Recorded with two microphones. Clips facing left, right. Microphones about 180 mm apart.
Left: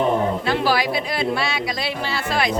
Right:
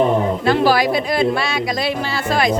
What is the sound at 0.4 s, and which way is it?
Speech, 45° right (ahead or behind).